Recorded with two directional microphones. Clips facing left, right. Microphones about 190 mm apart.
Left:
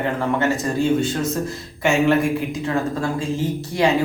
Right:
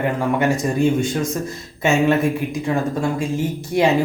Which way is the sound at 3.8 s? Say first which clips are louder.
Right 2 dB; 20° right (ahead or behind).